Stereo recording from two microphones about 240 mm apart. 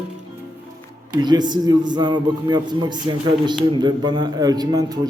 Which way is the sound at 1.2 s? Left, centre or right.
Centre.